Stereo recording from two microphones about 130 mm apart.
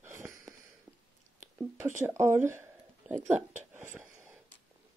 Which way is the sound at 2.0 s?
20° right (ahead or behind).